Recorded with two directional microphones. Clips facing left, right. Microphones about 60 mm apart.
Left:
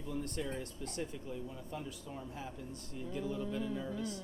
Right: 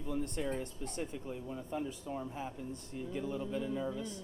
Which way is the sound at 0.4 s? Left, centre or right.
Right.